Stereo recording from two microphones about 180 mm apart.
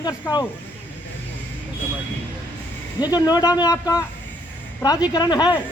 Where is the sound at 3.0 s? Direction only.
20° left (ahead or behind).